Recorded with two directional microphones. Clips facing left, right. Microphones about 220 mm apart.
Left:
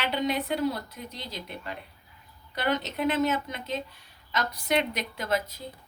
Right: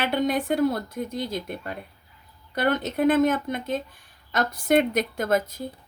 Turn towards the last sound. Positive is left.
turn(degrees=-50)  # may be behind; listen again after turning